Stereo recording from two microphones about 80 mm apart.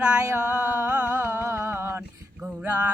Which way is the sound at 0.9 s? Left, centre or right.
Right.